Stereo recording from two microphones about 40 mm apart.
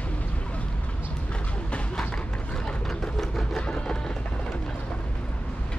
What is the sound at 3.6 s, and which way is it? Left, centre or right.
Music, left.